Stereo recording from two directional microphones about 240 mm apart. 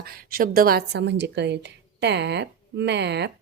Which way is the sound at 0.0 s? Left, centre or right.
Right.